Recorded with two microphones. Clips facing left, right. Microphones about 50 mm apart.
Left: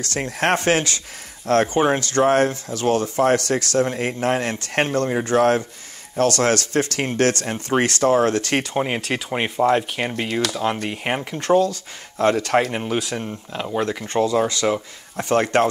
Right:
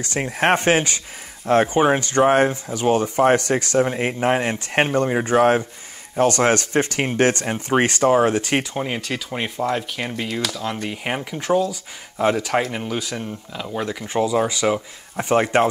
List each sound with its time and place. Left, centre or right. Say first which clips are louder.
0.0 s speech: right 2 dB; centre
8.7 s speech: left 3 dB; centre
10.5 s speech: left 4 dB; left
10.8 s speech: left 1 dB; centre
12.7 s speech: left 2 dB; centre
13.7 s speech: left 1 dB; centre